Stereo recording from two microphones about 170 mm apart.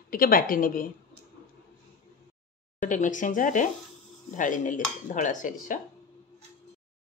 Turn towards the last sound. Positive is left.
turn(degrees=50)  # may be behind; listen again after turning